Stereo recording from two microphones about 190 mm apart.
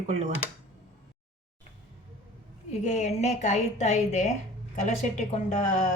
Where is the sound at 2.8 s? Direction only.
35° left (ahead or behind).